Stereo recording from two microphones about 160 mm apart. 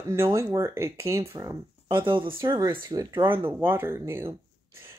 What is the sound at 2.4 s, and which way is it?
Speech, 20° right (ahead or behind).